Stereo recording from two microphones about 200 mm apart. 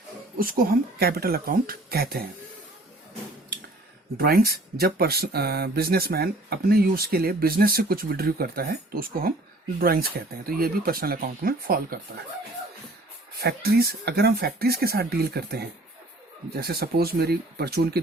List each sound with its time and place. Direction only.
0.3 s speech: 45° right (ahead or behind)
4.2 s speech: 50° right (ahead or behind)
13.4 s speech: 50° right (ahead or behind)